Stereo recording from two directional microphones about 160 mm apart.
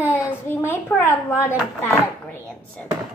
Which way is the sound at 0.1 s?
15° left (ahead or behind).